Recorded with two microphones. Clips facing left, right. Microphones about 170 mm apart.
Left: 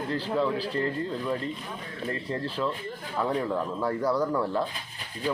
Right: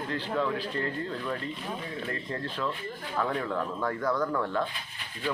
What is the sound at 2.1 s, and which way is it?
Speech, 30° left (ahead or behind).